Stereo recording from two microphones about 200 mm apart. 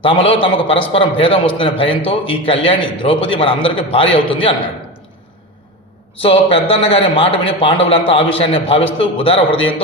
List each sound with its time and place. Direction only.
0.0 s a man's voice: 25° left (ahead or behind)
6.1 s a man's voice: 30° left (ahead or behind)